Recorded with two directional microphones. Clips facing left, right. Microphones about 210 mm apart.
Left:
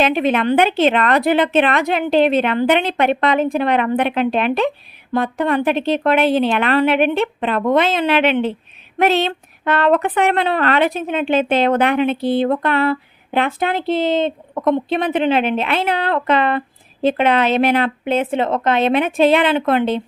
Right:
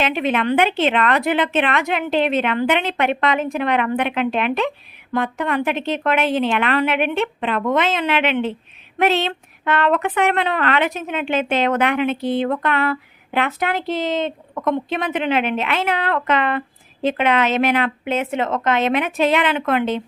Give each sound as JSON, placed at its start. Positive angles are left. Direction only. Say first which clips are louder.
{"t": 0.0, "sound": "speech", "louder": "left 4 dB", "side_deg": 40}